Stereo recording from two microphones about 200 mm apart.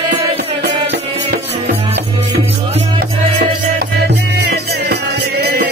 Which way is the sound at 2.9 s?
50° right (ahead or behind).